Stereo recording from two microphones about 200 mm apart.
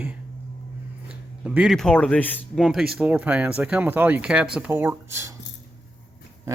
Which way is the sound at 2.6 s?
5° right (ahead or behind).